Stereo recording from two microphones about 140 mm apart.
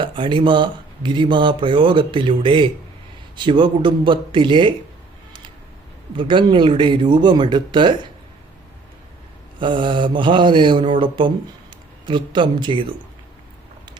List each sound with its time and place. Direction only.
0.0 s speech: 35° right (ahead or behind)
6.1 s speech: 35° right (ahead or behind)
9.6 s speech: 35° right (ahead or behind)